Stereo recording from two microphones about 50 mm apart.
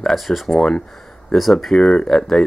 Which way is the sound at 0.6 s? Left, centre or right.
Centre.